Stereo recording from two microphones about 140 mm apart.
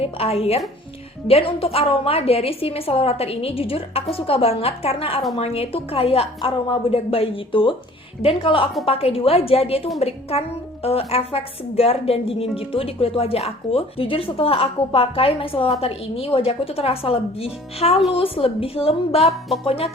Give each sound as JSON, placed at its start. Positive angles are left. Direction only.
{"t": 0.0, "sound": "a woman's voice", "side_deg": 45}